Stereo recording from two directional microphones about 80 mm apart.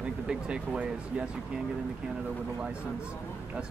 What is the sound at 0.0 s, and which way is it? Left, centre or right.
Speech, centre.